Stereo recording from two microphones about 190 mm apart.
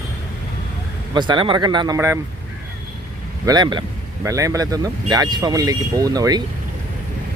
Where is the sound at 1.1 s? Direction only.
25° right (ahead or behind).